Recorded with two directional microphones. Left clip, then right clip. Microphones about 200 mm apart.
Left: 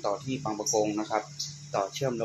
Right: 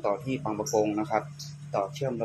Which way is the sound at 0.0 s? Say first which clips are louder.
Right 2 dB; 10° right (ahead or behind).